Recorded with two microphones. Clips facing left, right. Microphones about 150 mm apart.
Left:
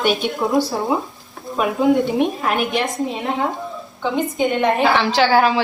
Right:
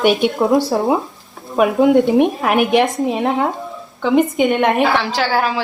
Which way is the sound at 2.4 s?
65° right (ahead or behind).